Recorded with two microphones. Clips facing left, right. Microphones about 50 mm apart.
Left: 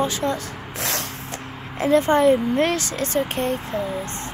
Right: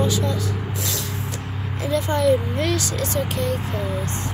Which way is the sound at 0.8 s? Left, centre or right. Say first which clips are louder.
Left 2 dB; left.